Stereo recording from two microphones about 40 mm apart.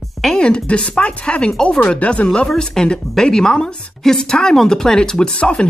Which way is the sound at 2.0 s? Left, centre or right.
Left.